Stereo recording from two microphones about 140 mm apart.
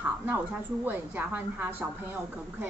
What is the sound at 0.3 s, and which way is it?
A woman's voice, 10° right (ahead or behind).